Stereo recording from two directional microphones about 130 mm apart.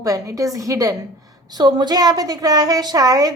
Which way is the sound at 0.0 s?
25° right (ahead or behind).